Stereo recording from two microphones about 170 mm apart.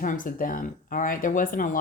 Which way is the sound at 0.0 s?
50° left (ahead or behind).